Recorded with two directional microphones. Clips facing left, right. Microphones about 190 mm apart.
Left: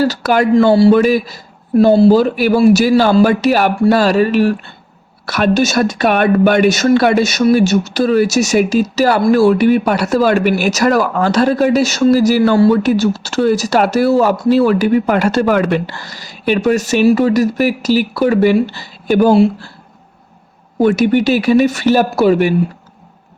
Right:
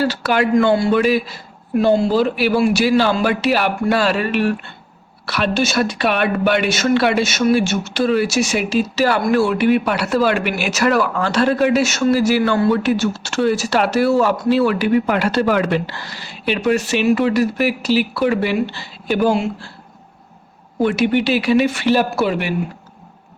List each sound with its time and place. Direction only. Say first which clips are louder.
0.0 s a woman's voice: left 4 dB; 40° left (ahead or behind)
20.8 s speech: left 5 dB; 45° left (ahead or behind)